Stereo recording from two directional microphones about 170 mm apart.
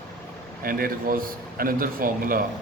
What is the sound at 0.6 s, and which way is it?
A man's voice, 60° right (ahead or behind).